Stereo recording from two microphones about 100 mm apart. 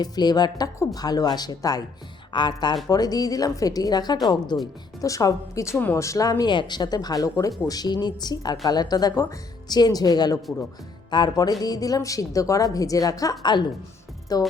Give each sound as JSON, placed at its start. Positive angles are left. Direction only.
{"t": 0.0, "sound": "speech", "side_deg": 45}
{"t": 4.9, "sound": "speech", "side_deg": 35}
{"t": 6.5, "sound": "speech", "side_deg": 50}
{"t": 13.4, "sound": "speech", "side_deg": 45}